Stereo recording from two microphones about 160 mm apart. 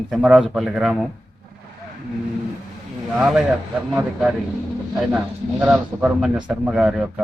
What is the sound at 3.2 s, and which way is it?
Speech, 5° right (ahead or behind).